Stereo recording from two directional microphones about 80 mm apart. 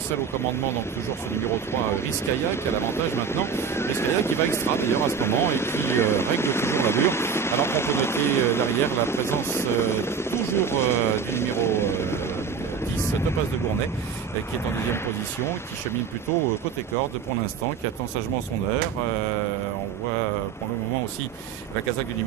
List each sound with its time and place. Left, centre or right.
1.3 s speech: left